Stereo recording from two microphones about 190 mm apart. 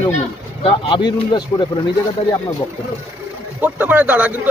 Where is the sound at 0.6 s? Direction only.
25° left (ahead or behind).